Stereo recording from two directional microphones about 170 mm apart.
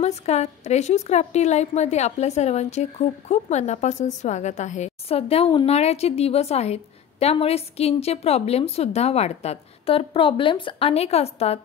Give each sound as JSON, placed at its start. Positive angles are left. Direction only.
{"t": 0.0, "sound": "a woman's voice", "side_deg": 40}